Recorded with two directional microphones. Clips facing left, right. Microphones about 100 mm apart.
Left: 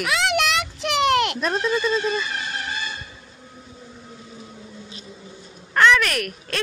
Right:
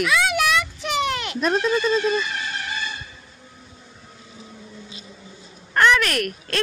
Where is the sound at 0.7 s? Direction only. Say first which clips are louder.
Left 5 dB; 80° left.